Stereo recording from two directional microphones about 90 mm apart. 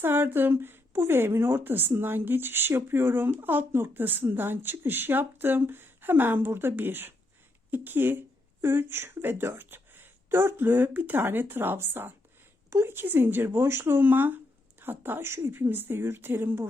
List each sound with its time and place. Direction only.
0.0 s a woman's voice: 25° right (ahead or behind)